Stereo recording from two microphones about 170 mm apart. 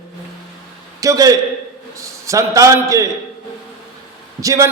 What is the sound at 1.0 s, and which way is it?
A man's voice, 20° right (ahead or behind).